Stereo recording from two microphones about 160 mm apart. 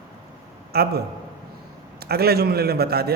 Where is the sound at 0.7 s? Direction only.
75° right (ahead or behind).